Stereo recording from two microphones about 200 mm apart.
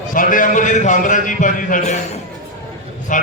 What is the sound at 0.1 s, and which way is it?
A man's voice, 40° left (ahead or behind).